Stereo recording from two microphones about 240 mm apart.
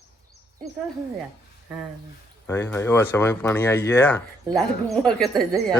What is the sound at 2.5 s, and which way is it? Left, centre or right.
Speech, centre.